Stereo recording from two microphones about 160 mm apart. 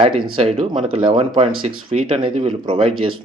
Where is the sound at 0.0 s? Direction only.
35° right (ahead or behind).